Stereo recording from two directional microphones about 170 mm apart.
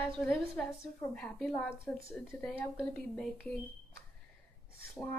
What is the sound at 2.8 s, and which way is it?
Speech, 5° left (ahead or behind).